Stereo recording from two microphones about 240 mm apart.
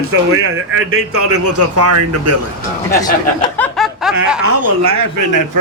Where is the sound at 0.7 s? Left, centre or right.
Right.